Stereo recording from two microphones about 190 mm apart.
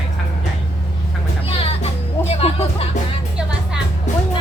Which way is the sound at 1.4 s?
30° left (ahead or behind).